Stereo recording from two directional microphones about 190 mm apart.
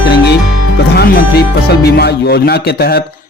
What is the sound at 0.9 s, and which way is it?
Speech, 55° left (ahead or behind).